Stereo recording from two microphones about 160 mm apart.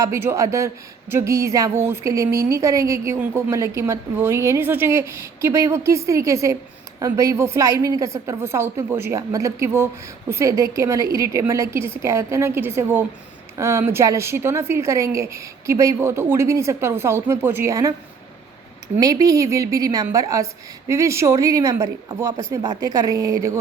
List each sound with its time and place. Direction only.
0.0 s a woman's voice: 15° right (ahead or behind)
18.9 s a woman's voice: 20° right (ahead or behind)